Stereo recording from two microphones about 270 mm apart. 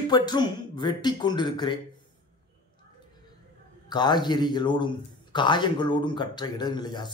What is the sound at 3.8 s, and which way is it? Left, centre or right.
A man's voice, centre.